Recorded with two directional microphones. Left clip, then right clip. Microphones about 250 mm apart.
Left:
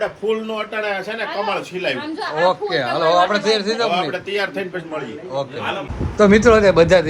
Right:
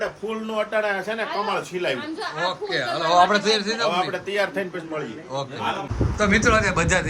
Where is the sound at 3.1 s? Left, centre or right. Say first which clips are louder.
Right 1 dB; right.